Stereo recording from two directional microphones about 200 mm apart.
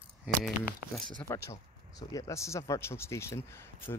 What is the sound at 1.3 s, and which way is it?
Speech, 15° left (ahead or behind).